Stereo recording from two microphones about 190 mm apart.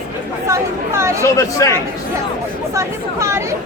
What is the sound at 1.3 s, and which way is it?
Speech, 15° left (ahead or behind).